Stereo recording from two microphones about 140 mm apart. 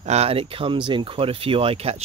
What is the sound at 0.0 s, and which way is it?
Speech, 50° right (ahead or behind).